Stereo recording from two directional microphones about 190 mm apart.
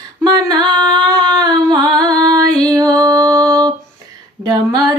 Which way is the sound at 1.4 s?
20° right (ahead or behind).